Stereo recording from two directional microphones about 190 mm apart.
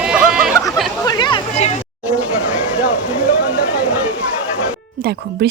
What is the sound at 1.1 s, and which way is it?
Speech, 25° left (ahead or behind).